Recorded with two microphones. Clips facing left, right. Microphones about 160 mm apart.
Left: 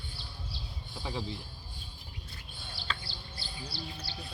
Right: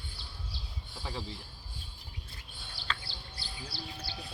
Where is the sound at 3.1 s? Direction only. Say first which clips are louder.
Left 1 dB; 60° right (ahead or behind).